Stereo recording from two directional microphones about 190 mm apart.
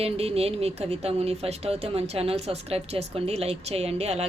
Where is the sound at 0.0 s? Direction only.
30° right (ahead or behind).